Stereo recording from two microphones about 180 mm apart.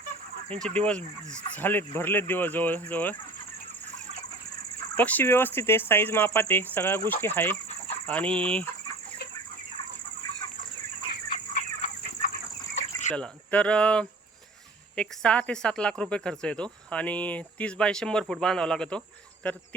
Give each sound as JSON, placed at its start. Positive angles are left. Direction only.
{"t": 0.5, "sound": "speech", "side_deg": 5}
{"t": 4.9, "sound": "speech", "side_deg": 10}
{"t": 11.5, "sound": "chicken", "side_deg": 45}
{"t": 13.1, "sound": "speech", "side_deg": 5}